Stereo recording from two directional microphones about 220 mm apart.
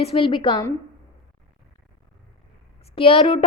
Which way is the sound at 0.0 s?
25° left (ahead or behind).